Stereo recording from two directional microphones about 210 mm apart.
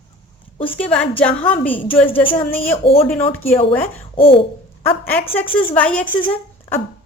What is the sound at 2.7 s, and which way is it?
Speech, 25° left (ahead or behind).